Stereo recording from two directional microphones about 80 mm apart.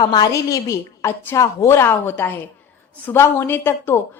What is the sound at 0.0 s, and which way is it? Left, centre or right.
A woman's voice, left.